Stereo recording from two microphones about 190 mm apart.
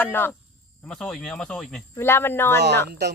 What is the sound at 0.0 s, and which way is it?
Speech, 10° left (ahead or behind).